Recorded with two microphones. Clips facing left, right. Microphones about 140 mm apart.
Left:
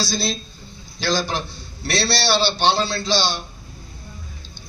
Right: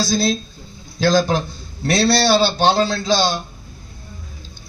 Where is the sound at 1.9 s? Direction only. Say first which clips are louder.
Right 6 dB; 50° right (ahead or behind).